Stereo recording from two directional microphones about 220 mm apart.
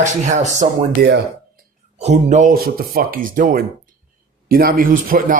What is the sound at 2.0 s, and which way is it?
A man's voice, 30° right (ahead or behind).